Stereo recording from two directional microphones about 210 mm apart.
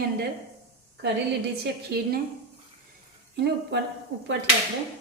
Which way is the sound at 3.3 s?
50° right (ahead or behind).